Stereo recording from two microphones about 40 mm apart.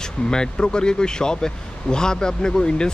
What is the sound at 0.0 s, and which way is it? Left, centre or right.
A man's voice, centre.